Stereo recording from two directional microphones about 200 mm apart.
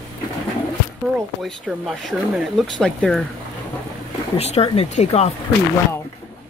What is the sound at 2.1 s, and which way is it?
Speech, centre (ahead or behind).